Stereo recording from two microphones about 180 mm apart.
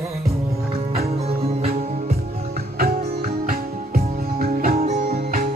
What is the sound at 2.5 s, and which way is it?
Music, 55° right (ahead or behind).